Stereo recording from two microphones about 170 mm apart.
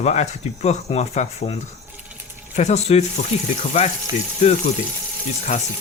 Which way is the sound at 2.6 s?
40° left (ahead or behind).